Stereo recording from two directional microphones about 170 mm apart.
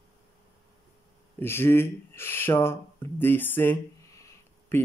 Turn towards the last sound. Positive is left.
turn(degrees=10)  # may be behind; listen again after turning